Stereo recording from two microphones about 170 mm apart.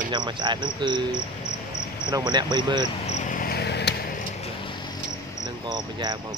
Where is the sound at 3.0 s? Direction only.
40° left (ahead or behind); by 3.9 s 75° left (ahead or behind).